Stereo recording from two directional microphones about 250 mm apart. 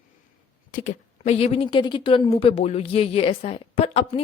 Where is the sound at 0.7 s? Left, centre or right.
Left.